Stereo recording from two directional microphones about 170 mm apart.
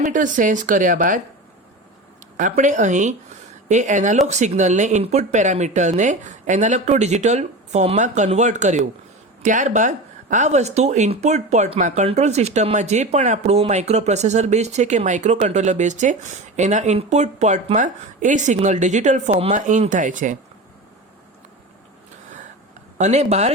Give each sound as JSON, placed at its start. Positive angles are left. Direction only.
{"t": 0.0, "sound": "speech", "side_deg": -50}
{"t": 2.4, "sound": "speech", "side_deg": -45}
{"t": 23.0, "sound": "speech", "side_deg": -40}